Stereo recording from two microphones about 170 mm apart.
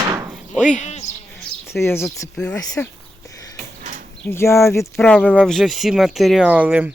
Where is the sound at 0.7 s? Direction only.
45° left (ahead or behind).